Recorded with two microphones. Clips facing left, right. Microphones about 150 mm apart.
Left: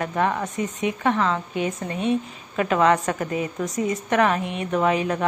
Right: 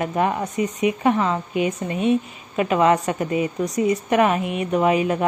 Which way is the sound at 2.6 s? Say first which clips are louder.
Right 1 dB; 15° right (ahead or behind).